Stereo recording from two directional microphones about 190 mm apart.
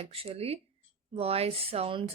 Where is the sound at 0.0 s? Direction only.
30° right (ahead or behind).